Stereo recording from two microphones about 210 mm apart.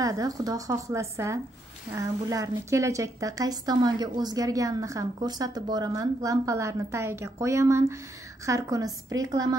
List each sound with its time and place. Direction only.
0.0 s a woman's voice: 15° right (ahead or behind)